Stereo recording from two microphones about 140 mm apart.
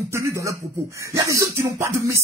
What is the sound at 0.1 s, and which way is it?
Speech, 20° right (ahead or behind).